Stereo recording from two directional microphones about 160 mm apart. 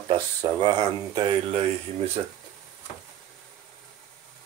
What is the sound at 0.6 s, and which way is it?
Speech, 25° right (ahead or behind).